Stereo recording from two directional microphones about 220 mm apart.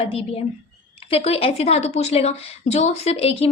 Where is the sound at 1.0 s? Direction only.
25° left (ahead or behind).